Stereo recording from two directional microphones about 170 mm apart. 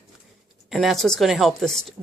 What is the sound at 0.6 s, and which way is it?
A woman's voice, centre (ahead or behind).